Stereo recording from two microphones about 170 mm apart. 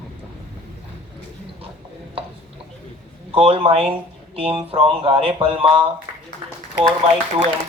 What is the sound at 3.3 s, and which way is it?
Speech, 35° right (ahead or behind).